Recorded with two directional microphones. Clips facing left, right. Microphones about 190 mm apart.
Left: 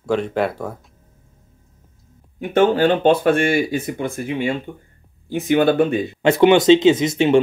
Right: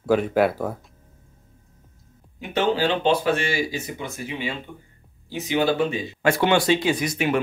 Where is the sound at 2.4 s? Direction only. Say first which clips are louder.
Left 7 dB; 55° left (ahead or behind).